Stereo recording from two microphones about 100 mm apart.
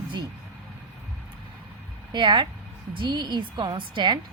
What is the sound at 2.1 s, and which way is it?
Speech, 50° right (ahead or behind).